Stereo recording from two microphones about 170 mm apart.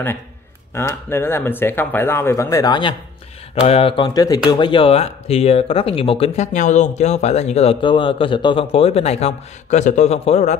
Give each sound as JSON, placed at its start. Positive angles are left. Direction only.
{"t": 0.7, "sound": "speech", "side_deg": 15}